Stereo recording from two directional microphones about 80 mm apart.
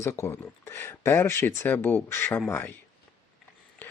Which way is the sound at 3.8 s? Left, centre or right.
Left.